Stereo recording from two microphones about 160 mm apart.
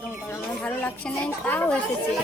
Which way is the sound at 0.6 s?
10° left (ahead or behind).